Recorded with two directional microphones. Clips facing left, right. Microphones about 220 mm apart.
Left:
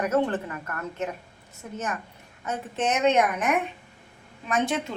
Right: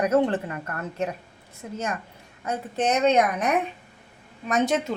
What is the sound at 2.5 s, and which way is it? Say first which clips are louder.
A woman's voice: right 2 dB; 35° right (ahead or behind).